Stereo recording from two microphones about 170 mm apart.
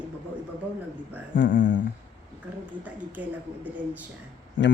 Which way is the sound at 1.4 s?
90° left.